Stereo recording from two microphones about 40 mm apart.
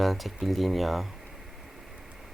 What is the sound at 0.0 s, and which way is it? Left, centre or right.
Speech, centre.